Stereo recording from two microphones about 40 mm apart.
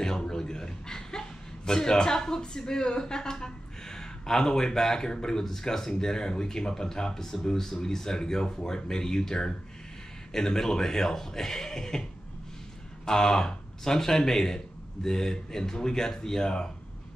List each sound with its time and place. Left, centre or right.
0.0 s a man's voice: centre